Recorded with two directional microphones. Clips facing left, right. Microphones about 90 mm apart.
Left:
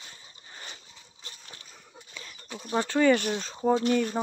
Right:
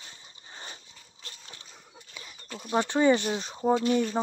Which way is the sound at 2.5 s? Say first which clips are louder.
Even; 15° right (ahead or behind).